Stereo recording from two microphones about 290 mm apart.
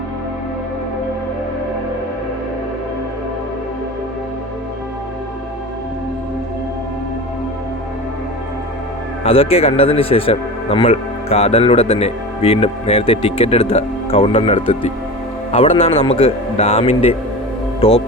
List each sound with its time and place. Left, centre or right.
9.2 s speech: centre